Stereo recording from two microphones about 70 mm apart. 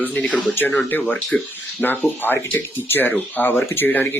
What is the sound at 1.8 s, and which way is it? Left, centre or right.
Speech, left.